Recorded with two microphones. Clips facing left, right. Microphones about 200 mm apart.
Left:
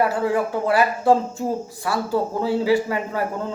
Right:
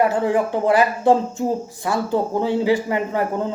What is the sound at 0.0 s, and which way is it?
Speech, 20° right (ahead or behind).